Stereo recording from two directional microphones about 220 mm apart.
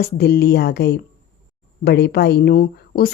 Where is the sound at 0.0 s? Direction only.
45° left (ahead or behind).